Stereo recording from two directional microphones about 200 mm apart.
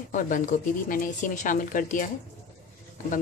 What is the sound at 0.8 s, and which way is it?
Speech, 40° left (ahead or behind).